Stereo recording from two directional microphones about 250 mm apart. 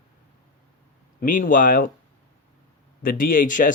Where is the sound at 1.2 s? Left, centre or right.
Left.